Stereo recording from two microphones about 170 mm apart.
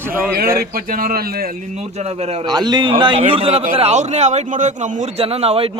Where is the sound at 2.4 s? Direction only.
25° right (ahead or behind).